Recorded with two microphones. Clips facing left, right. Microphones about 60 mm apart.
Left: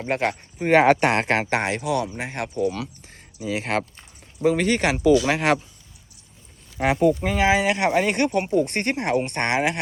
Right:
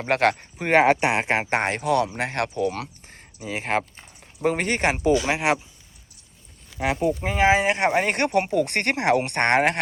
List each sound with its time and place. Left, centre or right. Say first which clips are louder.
0.1 s speech: right 4 dB; right
0.9 s speech: left 2 dB; centre
1.5 s speech: right 2 dB; right
3.4 s speech: left 1 dB; right
5.3 s speech: left 2 dB; centre
7.0 s speech: left 6 dB; centre
7.3 s speech: right 1 dB; right
8.1 s speech: even; right
8.5 s speech: left 1 dB; right